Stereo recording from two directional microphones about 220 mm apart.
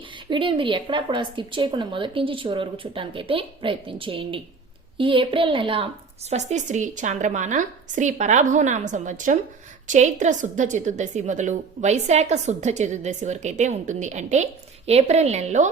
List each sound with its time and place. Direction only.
0.3 s a woman's voice: 20° right (ahead or behind)